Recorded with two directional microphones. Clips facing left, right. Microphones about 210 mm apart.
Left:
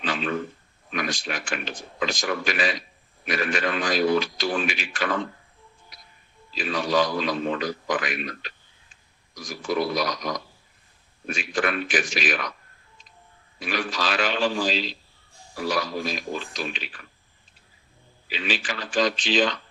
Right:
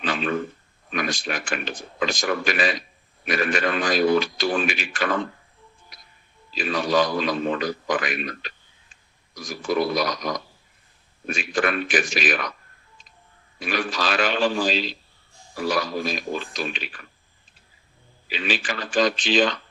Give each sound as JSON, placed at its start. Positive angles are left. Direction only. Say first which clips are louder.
{"t": 0.0, "sound": "a sound", "louder": "right 2 dB", "side_deg": -50}
{"t": 0.9, "sound": "a man's voice", "louder": "right 2 dB", "side_deg": -50}
{"t": 6.6, "sound": "a man's voice", "louder": "right 2 dB", "side_deg": -50}
{"t": 13.6, "sound": "a man's voice", "louder": "right 2 dB", "side_deg": -50}
{"t": 18.3, "sound": "a man's voice", "louder": "right 2 dB", "side_deg": -50}